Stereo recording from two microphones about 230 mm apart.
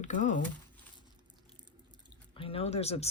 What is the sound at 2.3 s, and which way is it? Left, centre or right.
Speech, left.